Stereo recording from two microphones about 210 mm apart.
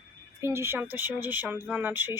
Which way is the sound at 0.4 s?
10° right (ahead or behind).